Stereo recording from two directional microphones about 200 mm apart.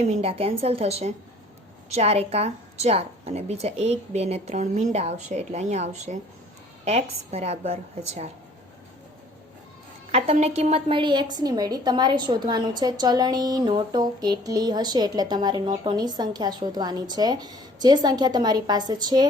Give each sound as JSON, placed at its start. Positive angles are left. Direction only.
{"t": 0.0, "sound": "a woman's voice", "side_deg": -30}
{"t": 10.1, "sound": "a woman's voice", "side_deg": -30}